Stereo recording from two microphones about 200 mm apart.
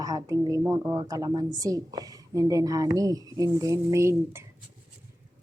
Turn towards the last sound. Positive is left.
turn(degrees=-15)  # may be behind; listen again after turning